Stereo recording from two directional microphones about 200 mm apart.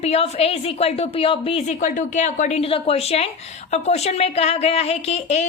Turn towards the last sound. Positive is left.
turn(degrees=35)  # may be behind; listen again after turning